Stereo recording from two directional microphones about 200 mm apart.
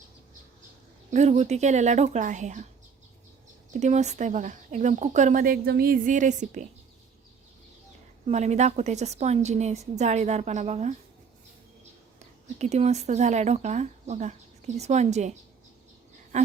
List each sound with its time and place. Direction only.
1.1 s speech: 35° right (ahead or behind)
3.7 s speech: 35° right (ahead or behind)
8.3 s speech: 35° right (ahead or behind)
12.5 s speech: 35° right (ahead or behind)
16.3 s a sound: 35° right (ahead or behind)